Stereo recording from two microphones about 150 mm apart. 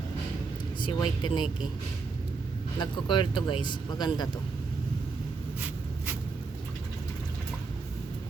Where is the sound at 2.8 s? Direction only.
30° left (ahead or behind).